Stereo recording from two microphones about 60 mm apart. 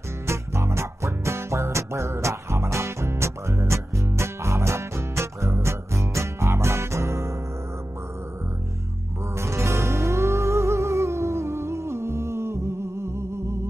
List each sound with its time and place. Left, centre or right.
0.3 s music: right
9.4 s music: right